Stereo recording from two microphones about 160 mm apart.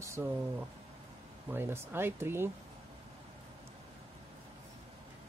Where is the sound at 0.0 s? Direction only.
15° right (ahead or behind).